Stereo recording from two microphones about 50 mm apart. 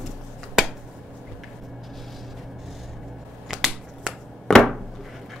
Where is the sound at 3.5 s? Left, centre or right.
Centre.